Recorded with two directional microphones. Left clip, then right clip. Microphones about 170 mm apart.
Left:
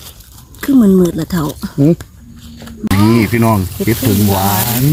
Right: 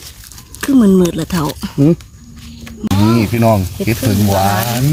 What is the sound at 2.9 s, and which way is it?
Music, 25° left (ahead or behind).